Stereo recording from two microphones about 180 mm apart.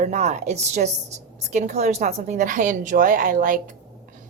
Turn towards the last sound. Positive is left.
turn(degrees=-50)  # may be behind; listen again after turning